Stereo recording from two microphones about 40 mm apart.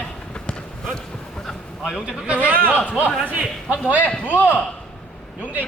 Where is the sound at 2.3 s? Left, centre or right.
Right.